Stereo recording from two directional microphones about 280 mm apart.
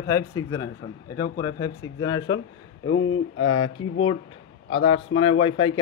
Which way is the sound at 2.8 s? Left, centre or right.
Left.